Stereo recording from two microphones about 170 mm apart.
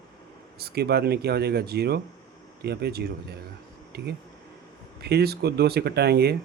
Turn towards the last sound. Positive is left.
turn(degrees=-70)  # may be behind; listen again after turning